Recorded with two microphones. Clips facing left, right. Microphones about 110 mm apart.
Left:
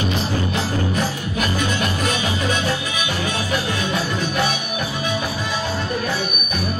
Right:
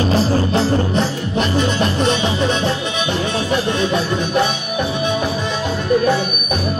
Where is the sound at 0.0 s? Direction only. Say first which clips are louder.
Right 6 dB; 35° right (ahead or behind).